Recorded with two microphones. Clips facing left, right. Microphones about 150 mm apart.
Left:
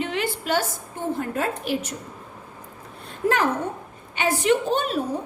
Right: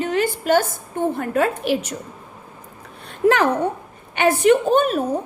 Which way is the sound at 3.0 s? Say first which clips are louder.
Right 6 dB; 75° right (ahead or behind).